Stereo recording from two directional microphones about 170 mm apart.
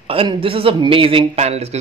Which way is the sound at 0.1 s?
30° right (ahead or behind).